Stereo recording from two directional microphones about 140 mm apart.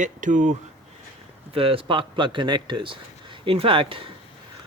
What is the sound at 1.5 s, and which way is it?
Speech, 40° right (ahead or behind).